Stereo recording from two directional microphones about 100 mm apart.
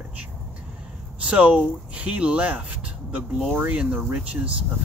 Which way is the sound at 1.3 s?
15° right (ahead or behind).